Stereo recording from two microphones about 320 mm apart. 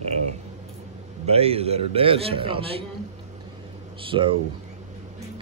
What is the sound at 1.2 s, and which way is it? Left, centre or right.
A man's voice, centre.